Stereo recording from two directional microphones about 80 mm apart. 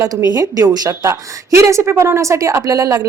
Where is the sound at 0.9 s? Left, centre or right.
Right.